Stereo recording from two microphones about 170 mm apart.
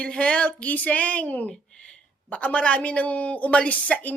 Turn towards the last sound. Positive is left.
turn(degrees=10)  # may be behind; listen again after turning